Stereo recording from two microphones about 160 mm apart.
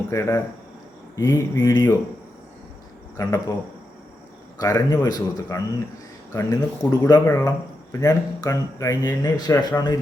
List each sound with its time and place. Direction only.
0.1 s speech: 20° left (ahead or behind)
3.2 s speech: 20° left (ahead or behind)
4.6 s speech: 25° left (ahead or behind)